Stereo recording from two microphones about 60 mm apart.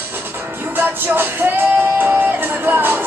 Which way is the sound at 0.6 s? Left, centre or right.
Right.